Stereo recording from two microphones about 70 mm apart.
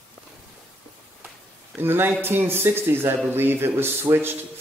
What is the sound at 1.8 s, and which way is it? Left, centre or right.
Speech, right.